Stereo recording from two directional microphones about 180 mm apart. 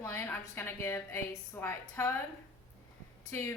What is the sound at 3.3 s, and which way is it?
Speech, 15° left (ahead or behind).